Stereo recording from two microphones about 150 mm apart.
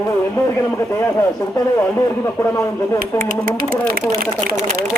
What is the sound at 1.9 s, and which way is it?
A man's voice, 20° left (ahead or behind).